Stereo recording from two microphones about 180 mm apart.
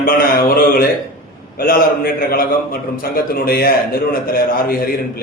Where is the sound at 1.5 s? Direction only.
55° left (ahead or behind).